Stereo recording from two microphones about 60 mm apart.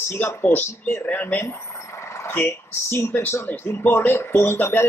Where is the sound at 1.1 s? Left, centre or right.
Left.